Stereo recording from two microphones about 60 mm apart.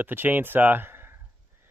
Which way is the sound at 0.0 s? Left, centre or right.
Right.